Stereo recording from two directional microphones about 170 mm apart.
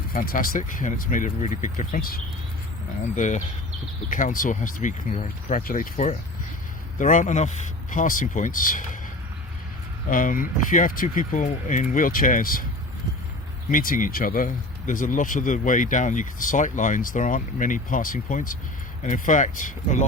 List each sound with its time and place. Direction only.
0.1 s speech: 55° left (ahead or behind)
3.2 s speech: 45° left (ahead or behind)
10.1 s speech: 50° left (ahead or behind)
13.7 s speech: 55° left (ahead or behind)